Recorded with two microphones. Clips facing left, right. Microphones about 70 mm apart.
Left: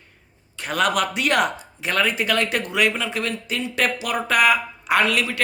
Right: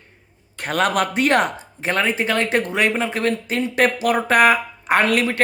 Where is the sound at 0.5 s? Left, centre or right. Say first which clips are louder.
Right 2 dB; right.